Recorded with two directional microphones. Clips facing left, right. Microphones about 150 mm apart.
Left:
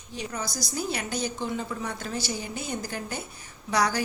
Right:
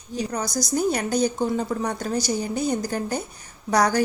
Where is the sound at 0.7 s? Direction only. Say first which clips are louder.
Right 9 dB; 45° right (ahead or behind).